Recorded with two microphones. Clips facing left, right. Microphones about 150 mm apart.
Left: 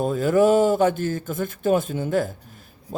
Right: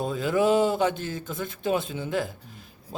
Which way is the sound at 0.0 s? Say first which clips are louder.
Left 5 dB; 50° left (ahead or behind).